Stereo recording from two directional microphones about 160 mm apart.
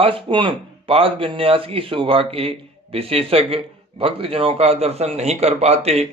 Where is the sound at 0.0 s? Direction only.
35° right (ahead or behind).